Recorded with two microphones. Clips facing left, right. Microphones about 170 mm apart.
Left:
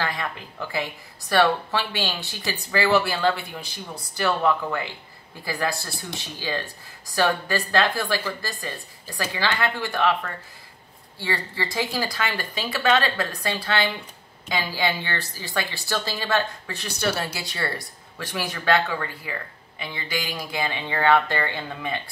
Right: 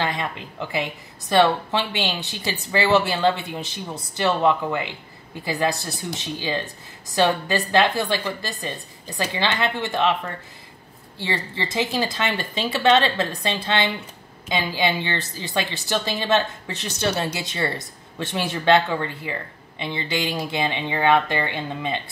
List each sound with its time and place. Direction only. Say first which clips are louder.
0.0 s a woman's voice: right 3 dB; 20° right (ahead or behind)